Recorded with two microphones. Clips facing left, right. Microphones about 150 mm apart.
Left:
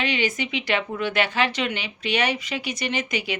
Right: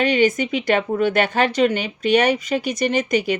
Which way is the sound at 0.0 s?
45° right (ahead or behind).